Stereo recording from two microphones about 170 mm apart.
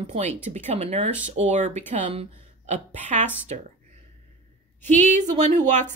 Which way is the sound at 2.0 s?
35° right (ahead or behind).